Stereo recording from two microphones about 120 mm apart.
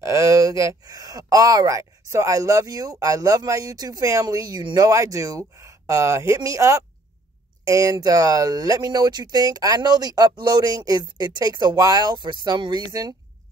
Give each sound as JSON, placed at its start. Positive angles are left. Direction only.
{"t": 0.0, "sound": "speech", "side_deg": -25}